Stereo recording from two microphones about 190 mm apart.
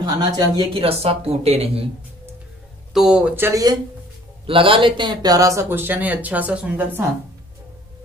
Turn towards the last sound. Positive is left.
turn(degrees=-10)  # may be behind; listen again after turning